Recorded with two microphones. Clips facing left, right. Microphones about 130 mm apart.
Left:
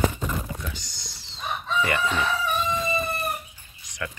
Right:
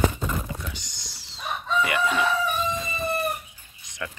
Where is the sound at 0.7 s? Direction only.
15° right (ahead or behind).